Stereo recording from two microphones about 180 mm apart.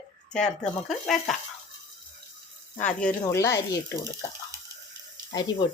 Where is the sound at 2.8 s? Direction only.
10° left (ahead or behind).